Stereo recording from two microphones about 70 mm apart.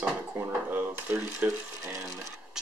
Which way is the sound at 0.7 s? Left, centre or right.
Right.